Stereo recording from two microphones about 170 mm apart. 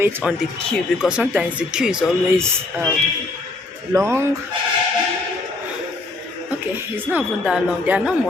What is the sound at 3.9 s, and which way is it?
Speech, 15° right (ahead or behind).